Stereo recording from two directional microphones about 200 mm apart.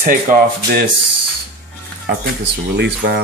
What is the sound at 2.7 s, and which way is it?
Speech, 55° right (ahead or behind).